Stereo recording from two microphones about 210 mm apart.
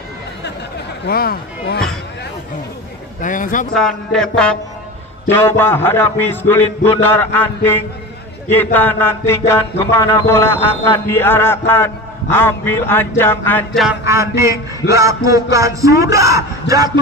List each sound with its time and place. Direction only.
1.0 s speech: 45° left (ahead or behind)
3.2 s a man's voice: 40° left (ahead or behind)
3.7 s a sound: 5° left (ahead or behind)
14.0 s speech: 15° right (ahead or behind)